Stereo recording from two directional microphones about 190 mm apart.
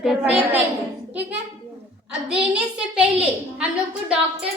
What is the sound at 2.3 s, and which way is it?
A woman's voice, 5° right (ahead or behind).